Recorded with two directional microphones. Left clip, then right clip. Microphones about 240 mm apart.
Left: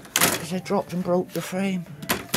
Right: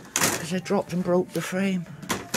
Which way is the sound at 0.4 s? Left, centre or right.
Centre.